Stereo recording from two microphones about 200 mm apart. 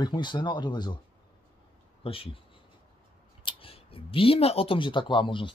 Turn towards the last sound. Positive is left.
turn(degrees=25)  # may be behind; listen again after turning